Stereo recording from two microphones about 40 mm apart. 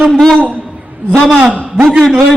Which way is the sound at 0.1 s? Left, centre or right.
Centre.